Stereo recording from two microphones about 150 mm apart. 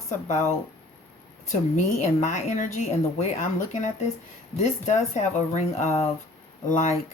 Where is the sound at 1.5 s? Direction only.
50° left (ahead or behind).